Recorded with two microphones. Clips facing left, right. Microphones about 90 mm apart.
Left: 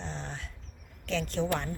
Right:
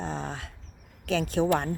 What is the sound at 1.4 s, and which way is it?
Speech, 60° right (ahead or behind).